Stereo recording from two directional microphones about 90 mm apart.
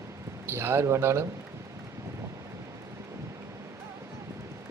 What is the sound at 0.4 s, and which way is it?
Speech, 25° right (ahead or behind).